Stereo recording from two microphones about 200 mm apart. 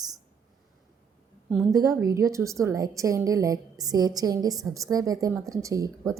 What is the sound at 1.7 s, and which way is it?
A woman's voice, 15° right (ahead or behind).